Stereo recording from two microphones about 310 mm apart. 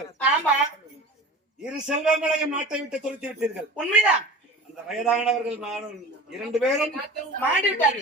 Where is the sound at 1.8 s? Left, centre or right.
Centre.